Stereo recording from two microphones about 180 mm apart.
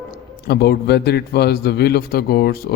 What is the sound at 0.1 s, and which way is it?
A man's voice, 65° left (ahead or behind).